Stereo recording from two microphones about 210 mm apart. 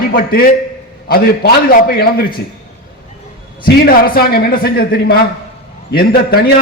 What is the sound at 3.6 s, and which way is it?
A man's voice, 45° left (ahead or behind).